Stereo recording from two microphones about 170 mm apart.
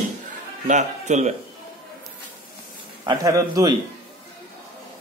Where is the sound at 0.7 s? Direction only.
45° right (ahead or behind).